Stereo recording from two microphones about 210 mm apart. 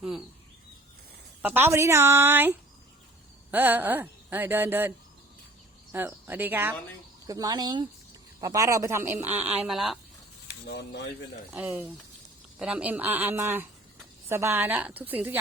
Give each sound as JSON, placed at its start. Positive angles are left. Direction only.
{"t": 1.4, "sound": "speech", "side_deg": -10}
{"t": 10.5, "sound": "speech", "side_deg": 55}
{"t": 11.5, "sound": "speech", "side_deg": -5}